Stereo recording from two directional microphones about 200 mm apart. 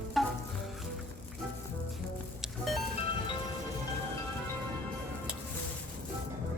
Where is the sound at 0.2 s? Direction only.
Centre (ahead or behind).